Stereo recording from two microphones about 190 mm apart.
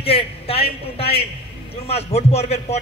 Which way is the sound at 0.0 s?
30° left (ahead or behind).